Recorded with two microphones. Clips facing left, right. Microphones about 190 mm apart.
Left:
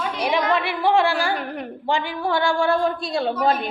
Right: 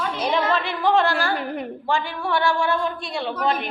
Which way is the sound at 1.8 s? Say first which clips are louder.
Left 2 dB; 15° left (ahead or behind).